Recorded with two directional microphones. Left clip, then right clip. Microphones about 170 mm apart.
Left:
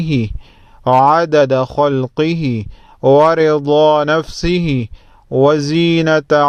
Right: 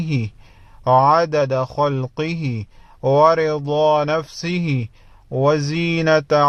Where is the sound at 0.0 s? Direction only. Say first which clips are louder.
Left 7 dB; 30° left (ahead or behind).